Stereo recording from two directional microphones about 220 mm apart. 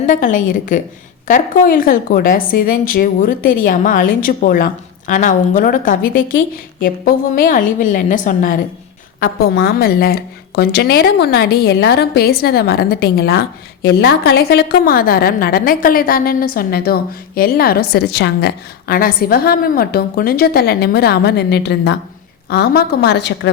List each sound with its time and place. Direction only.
0.1 s a woman's voice: 35° left (ahead or behind)